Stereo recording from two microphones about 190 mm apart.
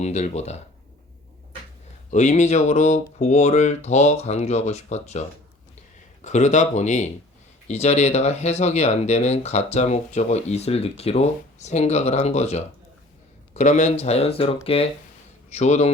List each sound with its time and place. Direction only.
0.0 s speech: 35° left (ahead or behind)
2.0 s speech: 40° left (ahead or behind)
6.2 s speech: 40° left (ahead or behind)